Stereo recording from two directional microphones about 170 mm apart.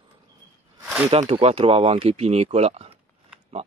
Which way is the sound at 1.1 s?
35° right (ahead or behind).